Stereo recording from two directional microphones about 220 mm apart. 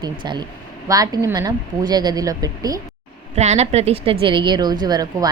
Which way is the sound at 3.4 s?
30° right (ahead or behind).